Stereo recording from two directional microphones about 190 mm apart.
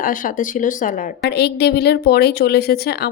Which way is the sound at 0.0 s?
45° left (ahead or behind).